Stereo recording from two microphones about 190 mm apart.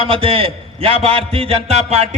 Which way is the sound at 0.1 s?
30° right (ahead or behind).